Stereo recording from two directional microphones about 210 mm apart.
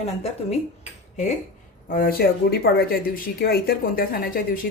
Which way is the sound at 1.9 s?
45° left (ahead or behind).